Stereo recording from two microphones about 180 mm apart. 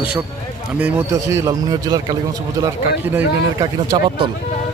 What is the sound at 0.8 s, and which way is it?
A man's voice, 15° right (ahead or behind).